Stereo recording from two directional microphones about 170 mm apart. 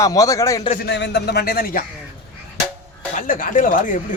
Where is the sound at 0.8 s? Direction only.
90° left; by 1.8 s 60° left (ahead or behind).